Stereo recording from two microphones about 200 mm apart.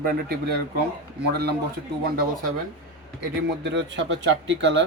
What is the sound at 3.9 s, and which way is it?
Speech, 65° right (ahead or behind).